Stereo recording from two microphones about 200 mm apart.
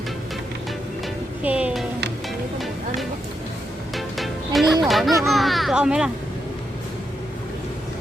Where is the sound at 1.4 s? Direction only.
5° right (ahead or behind).